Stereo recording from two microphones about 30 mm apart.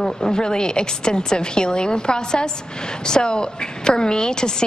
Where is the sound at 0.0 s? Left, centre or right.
Left.